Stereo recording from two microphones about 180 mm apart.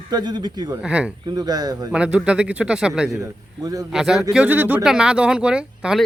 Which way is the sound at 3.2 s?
20° right (ahead or behind).